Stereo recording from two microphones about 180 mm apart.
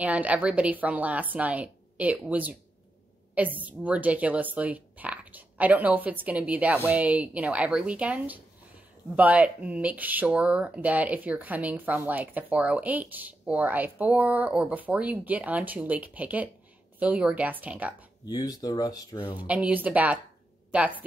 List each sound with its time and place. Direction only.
0.0 s speech: 10° right (ahead or behind)
18.2 s speech: 20° left (ahead or behind)
19.3 s speech: 10° right (ahead or behind)